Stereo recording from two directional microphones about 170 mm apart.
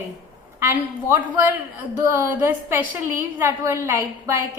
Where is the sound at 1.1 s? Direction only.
15° right (ahead or behind).